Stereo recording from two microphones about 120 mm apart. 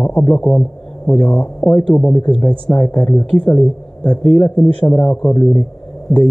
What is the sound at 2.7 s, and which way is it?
Speech, 15° left (ahead or behind).